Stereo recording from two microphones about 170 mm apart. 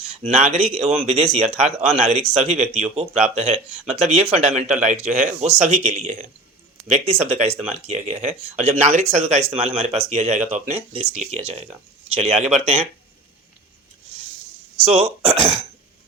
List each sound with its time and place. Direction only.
0.1 s speech: 40° right (ahead or behind)
14.8 s speech: 35° right (ahead or behind)